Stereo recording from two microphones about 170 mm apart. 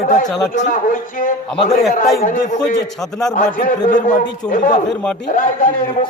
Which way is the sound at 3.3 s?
50° left (ahead or behind).